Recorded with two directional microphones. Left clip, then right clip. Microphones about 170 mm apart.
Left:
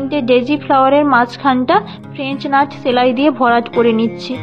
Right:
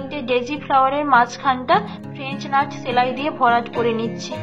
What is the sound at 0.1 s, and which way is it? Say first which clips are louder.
A woman's voice: left 8 dB; 55° left (ahead or behind).